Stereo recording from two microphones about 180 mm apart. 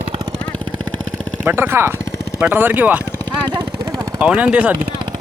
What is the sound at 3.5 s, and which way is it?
Vehicle, 25° right (ahead or behind).